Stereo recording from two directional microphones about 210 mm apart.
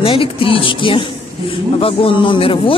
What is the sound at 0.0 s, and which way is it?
Speech, 25° left (ahead or behind).